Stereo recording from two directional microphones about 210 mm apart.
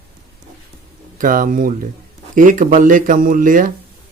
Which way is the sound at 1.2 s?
40° right (ahead or behind).